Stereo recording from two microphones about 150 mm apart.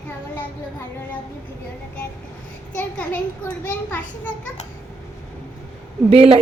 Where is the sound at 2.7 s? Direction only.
10° left (ahead or behind).